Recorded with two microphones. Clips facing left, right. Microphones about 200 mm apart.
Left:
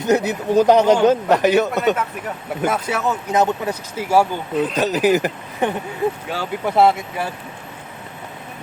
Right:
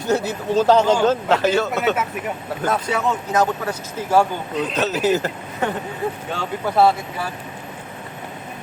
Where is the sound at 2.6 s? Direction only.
5° left (ahead or behind).